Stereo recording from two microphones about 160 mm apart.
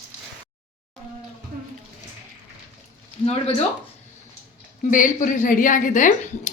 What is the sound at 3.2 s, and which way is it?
Speech, 40° left (ahead or behind).